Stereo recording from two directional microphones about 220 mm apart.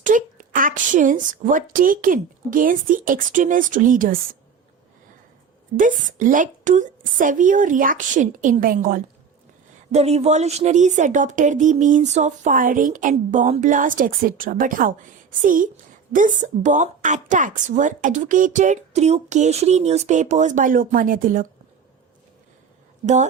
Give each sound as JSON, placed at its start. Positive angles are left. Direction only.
{"t": 0.0, "sound": "speech", "side_deg": -35}
{"t": 5.7, "sound": "speech", "side_deg": -35}
{"t": 9.9, "sound": "speech", "side_deg": -30}